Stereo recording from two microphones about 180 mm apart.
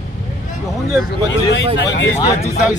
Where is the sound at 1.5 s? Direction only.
75° left (ahead or behind).